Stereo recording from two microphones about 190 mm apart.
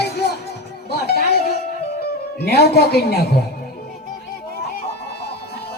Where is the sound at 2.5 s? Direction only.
55° left (ahead or behind).